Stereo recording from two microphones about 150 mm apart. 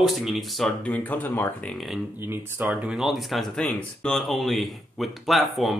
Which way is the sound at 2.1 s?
15° right (ahead or behind).